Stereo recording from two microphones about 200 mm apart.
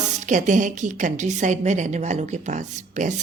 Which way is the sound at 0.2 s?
40° right (ahead or behind).